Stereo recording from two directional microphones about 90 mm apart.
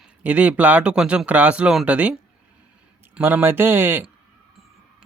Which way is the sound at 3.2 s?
25° right (ahead or behind).